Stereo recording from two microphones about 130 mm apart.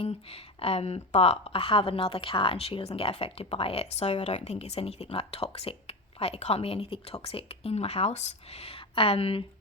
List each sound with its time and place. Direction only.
0.0 s speech: 50° left (ahead or behind)